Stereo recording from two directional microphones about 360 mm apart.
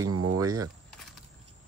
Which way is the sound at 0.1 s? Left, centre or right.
Right.